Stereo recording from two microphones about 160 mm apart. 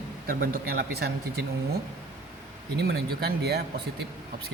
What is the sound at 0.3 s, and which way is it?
Speech, 85° right.